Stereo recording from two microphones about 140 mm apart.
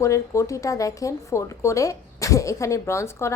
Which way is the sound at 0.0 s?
20° left (ahead or behind).